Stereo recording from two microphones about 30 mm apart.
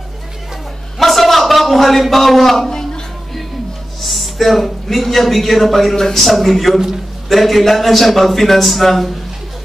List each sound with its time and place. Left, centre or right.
1.0 s a sound: centre
4.0 s a man's voice: centre
6.2 s a man's voice: centre